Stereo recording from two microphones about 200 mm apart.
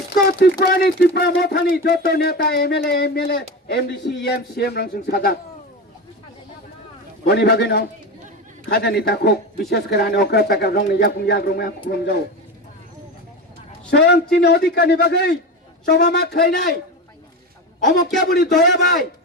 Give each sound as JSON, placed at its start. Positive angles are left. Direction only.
{"t": 0.3, "sound": "speech", "side_deg": 50}
{"t": 7.3, "sound": "a man's voice", "side_deg": 55}
{"t": 13.9, "sound": "a man's voice", "side_deg": 55}
{"t": 18.2, "sound": "a man's voice", "side_deg": 55}